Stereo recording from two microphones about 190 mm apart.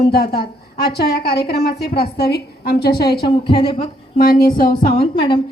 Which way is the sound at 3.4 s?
25° left (ahead or behind).